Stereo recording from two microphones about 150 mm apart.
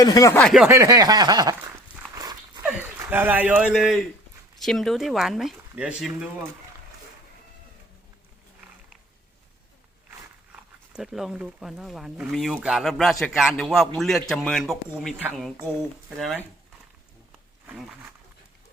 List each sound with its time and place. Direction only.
0.0 s speech: 25° left (ahead or behind)
0.3 s a man's voice: centre (ahead or behind)
0.7 s speech: 20° right (ahead or behind)
2.6 s a man's voice: 10° right (ahead or behind)
10.5 s a man's voice: 5° right (ahead or behind)